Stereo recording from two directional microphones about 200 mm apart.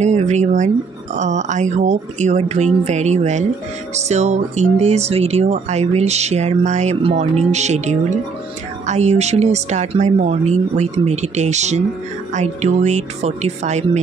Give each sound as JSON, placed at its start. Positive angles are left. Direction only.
{"t": 0.0, "sound": "speech", "side_deg": -35}